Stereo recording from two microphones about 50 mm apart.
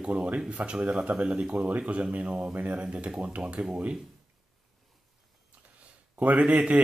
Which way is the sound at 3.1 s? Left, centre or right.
Centre.